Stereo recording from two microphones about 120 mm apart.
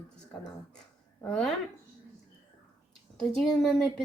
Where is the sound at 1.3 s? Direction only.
5° left (ahead or behind).